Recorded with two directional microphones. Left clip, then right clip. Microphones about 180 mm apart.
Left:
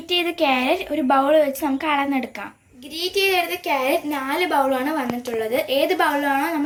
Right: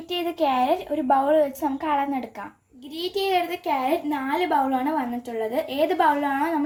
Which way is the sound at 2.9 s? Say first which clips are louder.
Left 4 dB; 40° right (ahead or behind).